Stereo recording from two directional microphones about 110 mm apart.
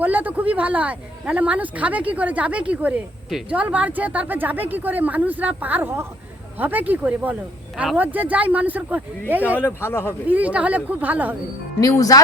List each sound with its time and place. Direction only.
0.0 s speech: 15° right (ahead or behind)
9.6 s speech: 20° left (ahead or behind)
10.2 s speech: 15° right (ahead or behind)
11.8 s speech: 35° left (ahead or behind)